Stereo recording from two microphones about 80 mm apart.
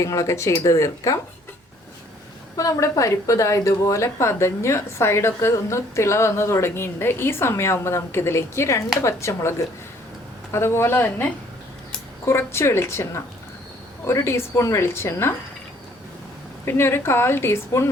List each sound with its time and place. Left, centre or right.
0.0 s a woman's voice: left
2.6 s a woman's voice: left
16.6 s a woman's voice: left